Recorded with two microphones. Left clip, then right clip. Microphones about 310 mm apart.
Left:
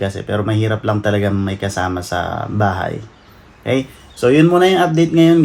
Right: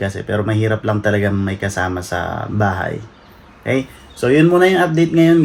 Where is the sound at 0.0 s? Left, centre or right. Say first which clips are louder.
Even; centre.